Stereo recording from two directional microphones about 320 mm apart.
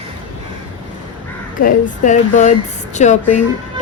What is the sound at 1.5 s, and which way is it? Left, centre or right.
A woman's voice, left.